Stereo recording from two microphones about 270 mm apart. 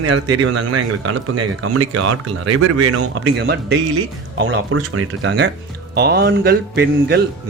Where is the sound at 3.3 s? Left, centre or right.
Right.